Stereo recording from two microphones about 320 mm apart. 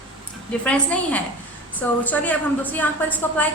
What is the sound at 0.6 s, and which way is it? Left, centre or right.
A woman's voice, centre.